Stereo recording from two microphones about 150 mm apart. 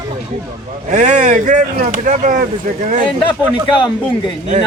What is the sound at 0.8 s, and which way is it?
Speech, 55° right (ahead or behind).